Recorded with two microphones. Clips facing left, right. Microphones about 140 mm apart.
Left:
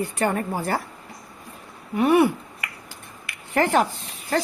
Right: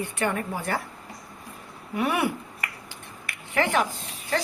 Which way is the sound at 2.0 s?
35° left (ahead or behind).